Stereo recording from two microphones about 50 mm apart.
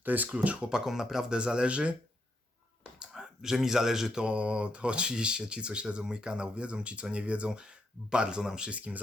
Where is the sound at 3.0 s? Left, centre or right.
Centre.